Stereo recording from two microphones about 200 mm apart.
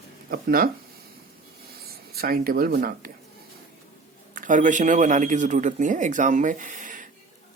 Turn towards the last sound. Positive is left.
turn(degrees=-40)  # may be behind; listen again after turning